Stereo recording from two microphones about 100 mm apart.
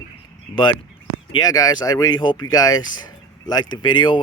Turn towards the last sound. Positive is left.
turn(degrees=50)  # may be behind; listen again after turning